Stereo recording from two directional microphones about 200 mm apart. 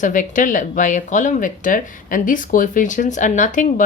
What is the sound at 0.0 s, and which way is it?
Speech, 40° left (ahead or behind).